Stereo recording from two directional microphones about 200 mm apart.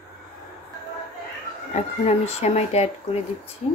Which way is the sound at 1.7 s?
35° left (ahead or behind).